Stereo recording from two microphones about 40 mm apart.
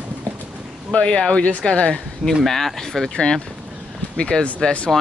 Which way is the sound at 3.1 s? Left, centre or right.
Left.